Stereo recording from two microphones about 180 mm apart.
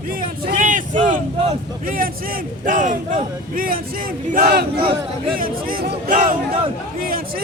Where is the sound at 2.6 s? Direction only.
50° right (ahead or behind).